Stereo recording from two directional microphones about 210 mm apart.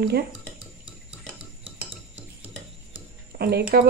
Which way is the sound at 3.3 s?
50° right (ahead or behind).